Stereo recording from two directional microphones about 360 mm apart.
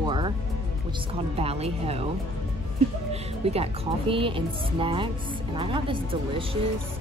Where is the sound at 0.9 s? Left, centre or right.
Centre.